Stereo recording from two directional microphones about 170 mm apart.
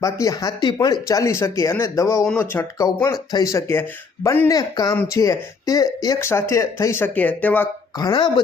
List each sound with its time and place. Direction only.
0.0 s speech: 20° left (ahead or behind)
7.9 s speech: 25° left (ahead or behind)